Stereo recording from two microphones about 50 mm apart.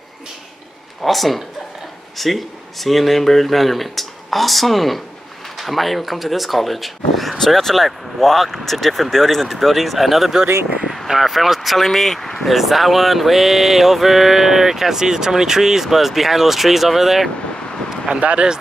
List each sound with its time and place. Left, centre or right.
1.0 s speech: centre
17.8 s vehicle: centre
18.2 s speech: right